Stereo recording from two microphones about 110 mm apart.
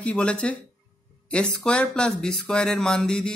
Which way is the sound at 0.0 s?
10° left (ahead or behind).